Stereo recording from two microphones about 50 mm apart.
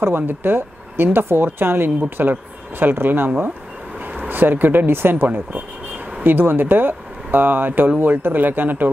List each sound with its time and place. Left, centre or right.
0.0 s speech: right